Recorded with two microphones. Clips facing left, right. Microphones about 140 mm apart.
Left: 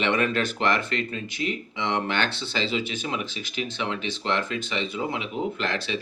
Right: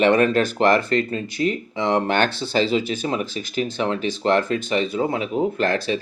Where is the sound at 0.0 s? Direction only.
40° right (ahead or behind).